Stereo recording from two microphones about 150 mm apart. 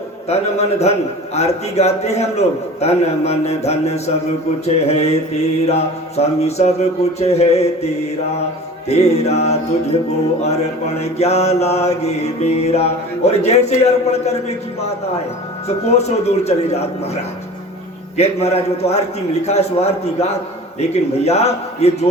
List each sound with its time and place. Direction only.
0.3 s mantra: 45° left (ahead or behind)
15.6 s mantra: 45° left (ahead or behind)